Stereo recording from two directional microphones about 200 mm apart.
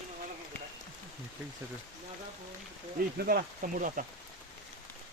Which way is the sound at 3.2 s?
50° right (ahead or behind).